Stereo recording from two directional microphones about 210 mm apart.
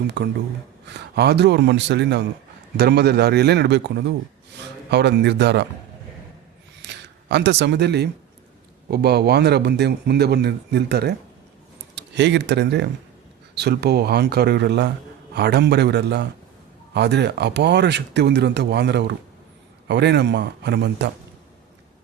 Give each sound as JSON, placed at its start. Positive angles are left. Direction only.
{"t": 0.2, "sound": "speech", "side_deg": -55}
{"t": 6.8, "sound": "speech", "side_deg": -55}